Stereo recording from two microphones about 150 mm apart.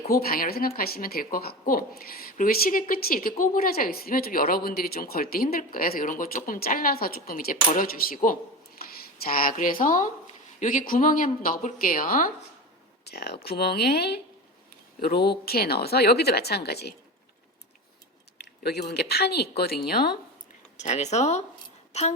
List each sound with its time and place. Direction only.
0.1 s speech: 80° left
8.8 s speech: 85° left; by 12.3 s 70° left (ahead or behind)
13.1 s a woman's voice: 90° left
18.3 s a woman's voice: 90° left
20.7 s speech: 50° left (ahead or behind)